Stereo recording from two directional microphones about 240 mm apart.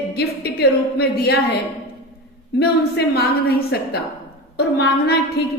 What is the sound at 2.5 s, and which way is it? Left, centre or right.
A woman's voice, left.